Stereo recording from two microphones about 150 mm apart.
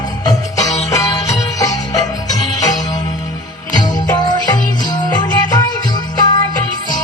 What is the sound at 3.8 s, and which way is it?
Music, 30° left (ahead or behind).